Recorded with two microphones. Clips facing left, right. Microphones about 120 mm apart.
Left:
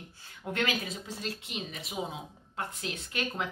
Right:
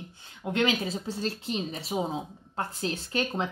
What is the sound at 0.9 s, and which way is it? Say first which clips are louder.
Speech: right 6 dB; 30° right (ahead or behind).